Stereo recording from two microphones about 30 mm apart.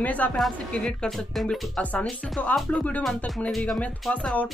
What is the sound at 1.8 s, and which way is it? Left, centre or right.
Speech, left.